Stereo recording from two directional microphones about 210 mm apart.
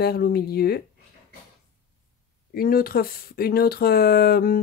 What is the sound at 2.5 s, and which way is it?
Speech, 45° left (ahead or behind).